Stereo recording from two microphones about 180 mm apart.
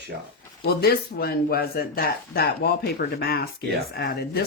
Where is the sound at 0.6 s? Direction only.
60° left (ahead or behind).